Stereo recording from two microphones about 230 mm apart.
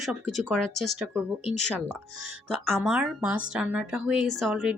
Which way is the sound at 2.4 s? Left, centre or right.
Centre.